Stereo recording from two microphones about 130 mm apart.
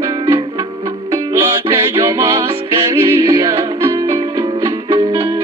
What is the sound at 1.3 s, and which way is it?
Music, 25° right (ahead or behind).